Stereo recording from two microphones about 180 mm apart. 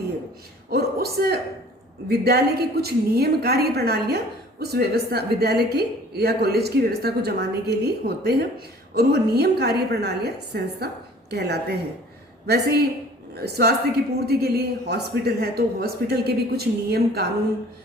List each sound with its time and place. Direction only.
0.7 s a woman's voice: 60° right (ahead or behind)